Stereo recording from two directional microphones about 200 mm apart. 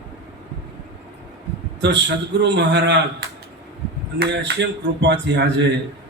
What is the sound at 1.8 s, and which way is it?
Mantra, 60° right (ahead or behind).